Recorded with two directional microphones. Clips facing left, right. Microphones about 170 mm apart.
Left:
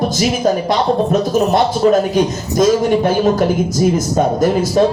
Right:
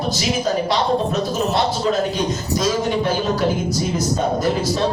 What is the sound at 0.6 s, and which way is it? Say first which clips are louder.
A man's voice: left 4 dB; 50° left (ahead or behind).